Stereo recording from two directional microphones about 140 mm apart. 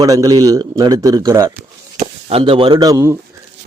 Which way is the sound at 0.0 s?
25° right (ahead or behind).